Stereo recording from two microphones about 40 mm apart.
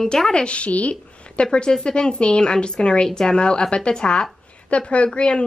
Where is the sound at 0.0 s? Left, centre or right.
Centre.